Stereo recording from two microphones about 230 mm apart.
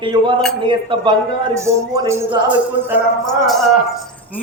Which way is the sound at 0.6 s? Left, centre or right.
Right.